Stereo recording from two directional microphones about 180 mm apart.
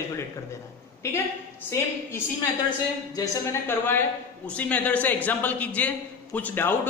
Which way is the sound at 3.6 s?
10° left (ahead or behind).